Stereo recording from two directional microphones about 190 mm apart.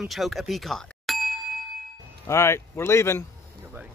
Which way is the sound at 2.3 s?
15° left (ahead or behind).